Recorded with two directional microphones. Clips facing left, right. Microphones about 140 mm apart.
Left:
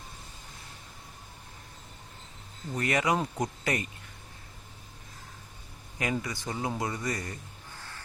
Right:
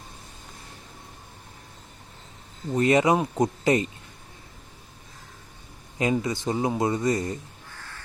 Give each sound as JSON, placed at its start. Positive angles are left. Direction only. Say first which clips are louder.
{"t": 2.7, "sound": "speech", "louder": "right 8 dB", "side_deg": -25}
{"t": 6.0, "sound": "speech", "louder": "right 7 dB", "side_deg": -25}